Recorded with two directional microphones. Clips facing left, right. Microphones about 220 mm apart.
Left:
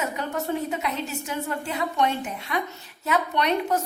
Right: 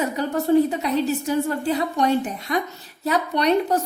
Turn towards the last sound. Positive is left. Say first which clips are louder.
# right 4 dB
turn(degrees=-35)  # may be behind; listen again after turning